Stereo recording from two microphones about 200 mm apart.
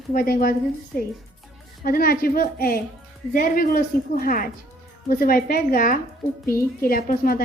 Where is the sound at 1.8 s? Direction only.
45° left (ahead or behind).